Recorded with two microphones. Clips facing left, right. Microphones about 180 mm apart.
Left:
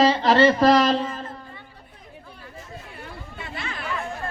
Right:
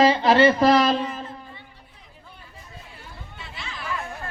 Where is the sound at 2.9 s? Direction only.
60° left (ahead or behind).